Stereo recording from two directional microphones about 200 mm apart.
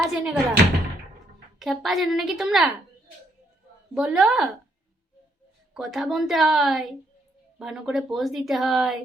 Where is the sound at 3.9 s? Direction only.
5° right (ahead or behind).